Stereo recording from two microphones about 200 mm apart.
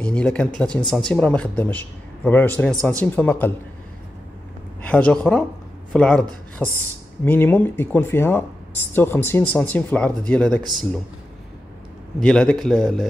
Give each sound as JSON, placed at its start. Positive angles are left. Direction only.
{"t": 0.0, "sound": "speech", "side_deg": 5}
{"t": 2.7, "sound": "speech", "side_deg": -15}
{"t": 3.0, "sound": "speech", "side_deg": 10}
{"t": 4.8, "sound": "speech", "side_deg": 5}
{"t": 12.2, "sound": "speech", "side_deg": 5}